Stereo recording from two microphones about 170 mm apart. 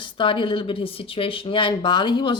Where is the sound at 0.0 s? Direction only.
30° left (ahead or behind).